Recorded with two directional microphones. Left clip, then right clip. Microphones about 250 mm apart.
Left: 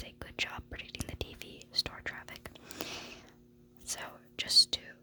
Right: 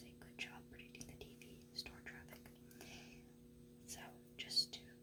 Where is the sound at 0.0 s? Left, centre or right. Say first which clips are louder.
Left 14 dB; left.